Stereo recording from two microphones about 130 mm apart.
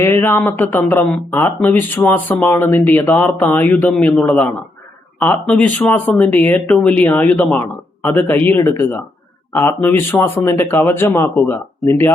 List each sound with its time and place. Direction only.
0.0 s speech: 15° left (ahead or behind)